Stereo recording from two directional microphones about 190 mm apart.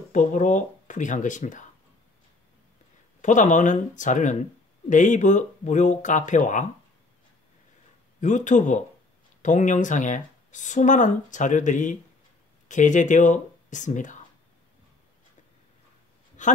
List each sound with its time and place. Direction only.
0.1 s speech: 40° left (ahead or behind)
3.2 s speech: 40° left (ahead or behind)
8.2 s speech: 40° left (ahead or behind)
16.4 s speech: 40° left (ahead or behind)